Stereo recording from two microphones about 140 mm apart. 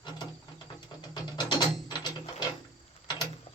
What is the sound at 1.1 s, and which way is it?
Music, 30° left (ahead or behind).